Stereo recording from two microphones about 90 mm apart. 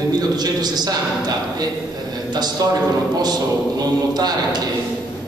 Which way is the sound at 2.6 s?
40° right (ahead or behind).